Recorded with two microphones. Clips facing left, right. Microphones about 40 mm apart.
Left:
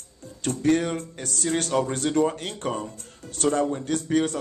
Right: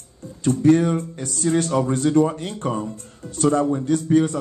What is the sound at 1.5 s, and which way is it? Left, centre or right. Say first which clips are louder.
A man's voice: right 4 dB; left.